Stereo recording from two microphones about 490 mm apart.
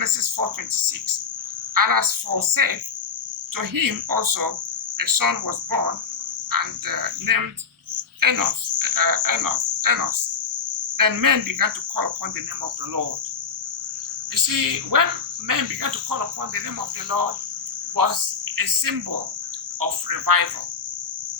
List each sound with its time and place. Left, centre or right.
0.0 s speech: right
1.7 s cricket: right
8.2 s speech: right
10.9 s cricket: right
14.3 s cricket: right